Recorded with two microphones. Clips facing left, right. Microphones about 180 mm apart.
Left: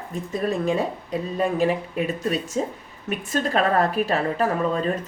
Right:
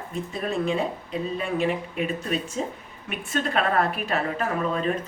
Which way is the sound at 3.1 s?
40° left (ahead or behind).